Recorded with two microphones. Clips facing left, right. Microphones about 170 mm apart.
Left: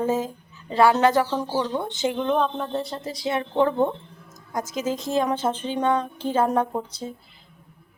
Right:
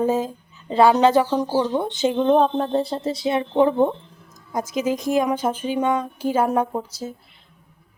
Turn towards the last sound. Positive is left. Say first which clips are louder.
# right 2 dB
turn(degrees=-5)  # may be behind; listen again after turning